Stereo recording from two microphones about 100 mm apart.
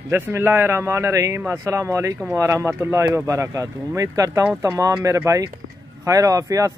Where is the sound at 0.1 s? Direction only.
25° right (ahead or behind).